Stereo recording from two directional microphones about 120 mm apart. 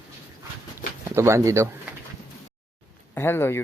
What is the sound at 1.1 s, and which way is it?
Speech, 25° right (ahead or behind).